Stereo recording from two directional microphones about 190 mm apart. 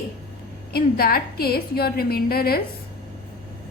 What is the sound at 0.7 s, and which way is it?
A woman's voice, 55° left (ahead or behind).